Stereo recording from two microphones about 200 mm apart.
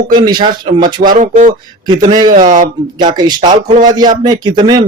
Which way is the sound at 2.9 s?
20° right (ahead or behind).